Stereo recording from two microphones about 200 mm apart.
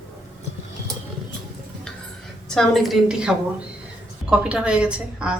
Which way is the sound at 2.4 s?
Centre (ahead or behind).